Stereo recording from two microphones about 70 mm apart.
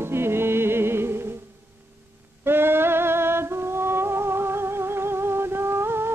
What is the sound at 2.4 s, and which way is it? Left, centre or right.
Music, right.